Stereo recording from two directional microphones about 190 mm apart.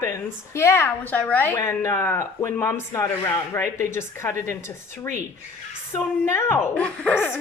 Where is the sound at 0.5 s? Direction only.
15° left (ahead or behind).